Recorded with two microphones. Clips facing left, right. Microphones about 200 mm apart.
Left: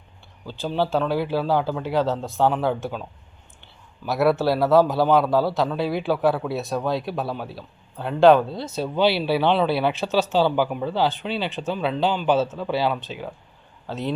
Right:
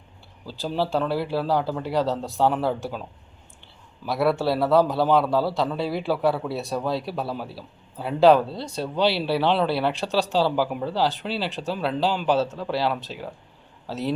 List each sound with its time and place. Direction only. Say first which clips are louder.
0.4 s a man's voice: left 2 dB; centre (ahead or behind)